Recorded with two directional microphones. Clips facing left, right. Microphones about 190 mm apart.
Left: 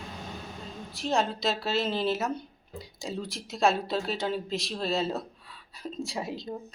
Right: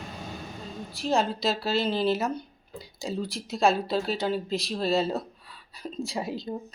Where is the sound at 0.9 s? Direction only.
Centre (ahead or behind).